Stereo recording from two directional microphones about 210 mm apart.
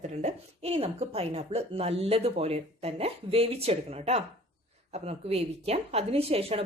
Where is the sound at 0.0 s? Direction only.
35° right (ahead or behind).